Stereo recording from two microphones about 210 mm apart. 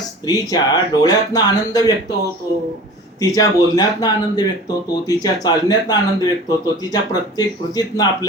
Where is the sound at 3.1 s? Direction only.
15° left (ahead or behind).